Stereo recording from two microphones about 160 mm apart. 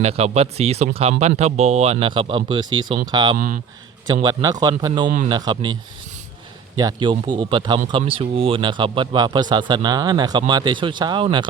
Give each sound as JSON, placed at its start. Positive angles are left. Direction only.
{"t": 0.0, "sound": "speech", "side_deg": -40}
{"t": 3.3, "sound": "speech", "side_deg": -60}
{"t": 4.0, "sound": "speech", "side_deg": -25}
{"t": 6.7, "sound": "speech", "side_deg": -25}